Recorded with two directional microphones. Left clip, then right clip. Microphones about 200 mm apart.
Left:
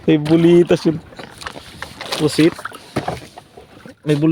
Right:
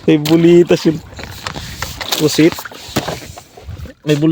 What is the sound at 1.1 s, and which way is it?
Vehicle, 45° right (ahead or behind).